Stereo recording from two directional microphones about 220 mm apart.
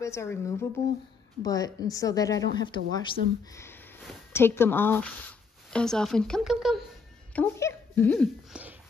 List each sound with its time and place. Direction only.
0.0 s speech: 10° left (ahead or behind)
4.3 s speech: 10° left (ahead or behind)
7.3 s speech: 10° left (ahead or behind)
8.5 s a sound: 5° right (ahead or behind)